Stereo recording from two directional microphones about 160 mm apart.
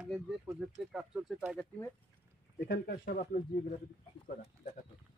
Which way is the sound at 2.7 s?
85° left.